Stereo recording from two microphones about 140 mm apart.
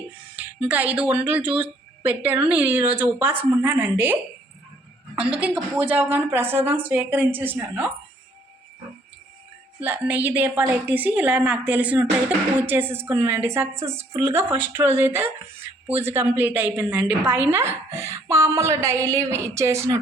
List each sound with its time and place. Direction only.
0.3 s speech: 10° right (ahead or behind)
9.8 s a woman's voice: 15° right (ahead or behind)